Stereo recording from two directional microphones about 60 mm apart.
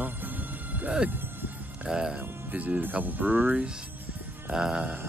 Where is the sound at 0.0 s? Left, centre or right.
Right.